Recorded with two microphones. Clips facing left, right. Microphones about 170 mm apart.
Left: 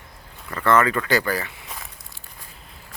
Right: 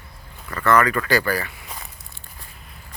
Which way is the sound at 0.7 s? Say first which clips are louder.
Right 1 dB; 25° left (ahead or behind).